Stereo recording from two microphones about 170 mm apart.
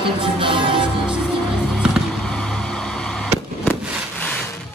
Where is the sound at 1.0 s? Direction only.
5° right (ahead or behind).